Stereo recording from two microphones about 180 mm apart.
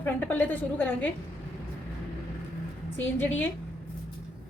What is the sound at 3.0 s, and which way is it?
Speech, 10° left (ahead or behind).